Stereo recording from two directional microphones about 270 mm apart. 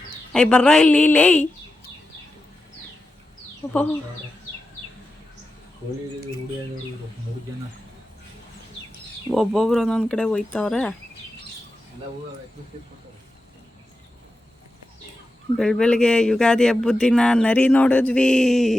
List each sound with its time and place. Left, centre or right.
0.3 s speech: centre
3.6 s speech: centre
9.3 s speech: centre
15.5 s speech: centre